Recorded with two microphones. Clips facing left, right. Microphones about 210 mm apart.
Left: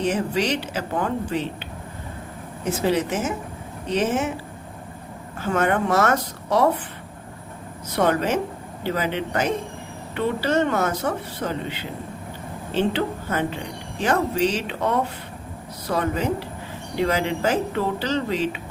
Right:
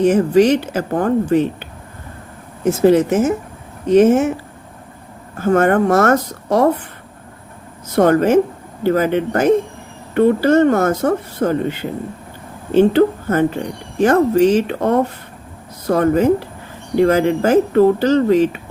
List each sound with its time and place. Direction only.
0.0 s speech: 50° right (ahead or behind)
2.6 s speech: 45° right (ahead or behind)
5.4 s speech: 50° right (ahead or behind)
7.9 s speech: 50° right (ahead or behind)